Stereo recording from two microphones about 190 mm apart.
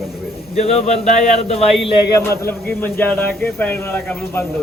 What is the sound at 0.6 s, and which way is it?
Speech, 35° left (ahead or behind).